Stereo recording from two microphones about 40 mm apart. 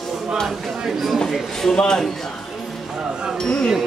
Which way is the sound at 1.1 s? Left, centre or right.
Centre.